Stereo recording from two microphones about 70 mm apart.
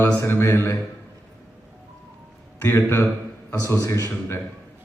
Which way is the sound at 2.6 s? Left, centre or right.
Left.